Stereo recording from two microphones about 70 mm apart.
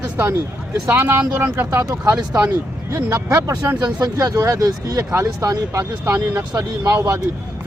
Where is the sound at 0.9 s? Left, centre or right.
Right.